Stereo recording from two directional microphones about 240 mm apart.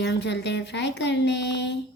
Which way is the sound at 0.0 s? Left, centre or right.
Left.